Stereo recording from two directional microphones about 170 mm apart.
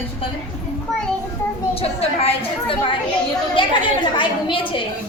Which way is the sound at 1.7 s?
35° left (ahead or behind).